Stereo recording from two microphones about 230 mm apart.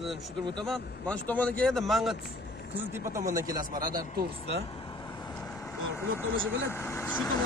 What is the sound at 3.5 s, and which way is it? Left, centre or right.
Speech, right.